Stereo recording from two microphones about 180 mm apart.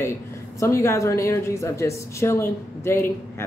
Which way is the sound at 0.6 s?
15° left (ahead or behind).